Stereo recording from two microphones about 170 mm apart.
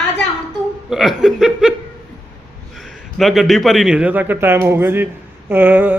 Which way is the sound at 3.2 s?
Centre (ahead or behind).